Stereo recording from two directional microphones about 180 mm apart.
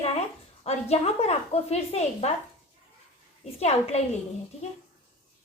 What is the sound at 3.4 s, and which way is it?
Speech, 35° left (ahead or behind).